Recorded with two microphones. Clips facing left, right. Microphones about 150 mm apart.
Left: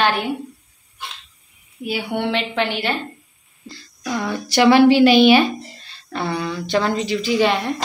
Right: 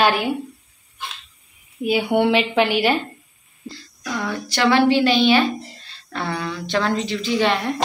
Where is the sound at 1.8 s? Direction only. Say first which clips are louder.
Right 5 dB; 20° right (ahead or behind).